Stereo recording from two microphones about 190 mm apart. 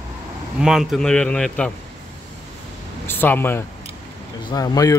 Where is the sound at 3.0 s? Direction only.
10° left (ahead or behind).